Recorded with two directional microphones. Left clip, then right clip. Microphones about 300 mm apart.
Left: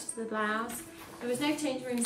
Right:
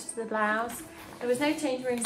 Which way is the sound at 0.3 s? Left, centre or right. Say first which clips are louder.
Right 4 dB; centre.